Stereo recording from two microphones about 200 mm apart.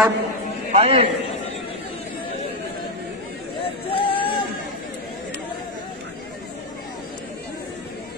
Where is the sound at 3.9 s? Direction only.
25° left (ahead or behind).